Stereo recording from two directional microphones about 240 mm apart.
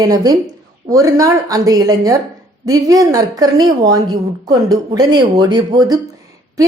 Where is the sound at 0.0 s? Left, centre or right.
Centre.